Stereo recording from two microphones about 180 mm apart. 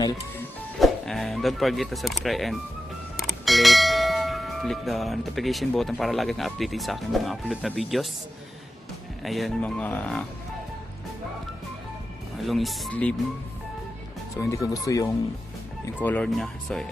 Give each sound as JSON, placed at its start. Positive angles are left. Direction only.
{"t": 0.7, "sound": "speech", "side_deg": 0}
{"t": 3.2, "sound": "bell", "side_deg": 0}
{"t": 9.2, "sound": "speech", "side_deg": 0}
{"t": 12.4, "sound": "speech", "side_deg": 0}
{"t": 14.3, "sound": "speech", "side_deg": 15}